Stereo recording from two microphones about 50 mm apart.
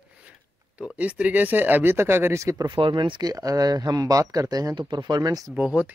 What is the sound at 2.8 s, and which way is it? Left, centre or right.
Speech, right.